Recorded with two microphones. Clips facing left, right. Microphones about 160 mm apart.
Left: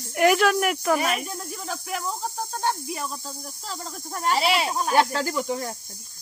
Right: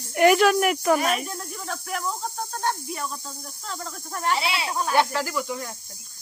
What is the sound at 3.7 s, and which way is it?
Speech, 25° left (ahead or behind).